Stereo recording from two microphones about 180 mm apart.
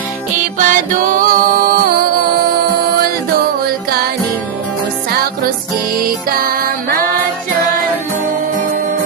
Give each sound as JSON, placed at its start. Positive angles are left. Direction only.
{"t": 0.6, "sound": "music", "side_deg": -50}
{"t": 6.1, "sound": "music", "side_deg": -55}